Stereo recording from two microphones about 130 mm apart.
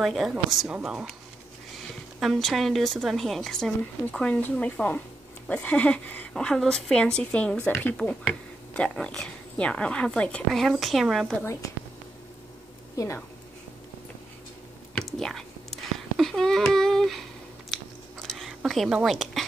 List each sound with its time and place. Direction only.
0.0 s a woman's voice: centre (ahead or behind)
2.1 s a woman's voice: centre (ahead or behind)
12.9 s a woman's voice: 25° left (ahead or behind)
15.0 s whispering: 5° left (ahead or behind)
18.2 s a sound: centre (ahead or behind)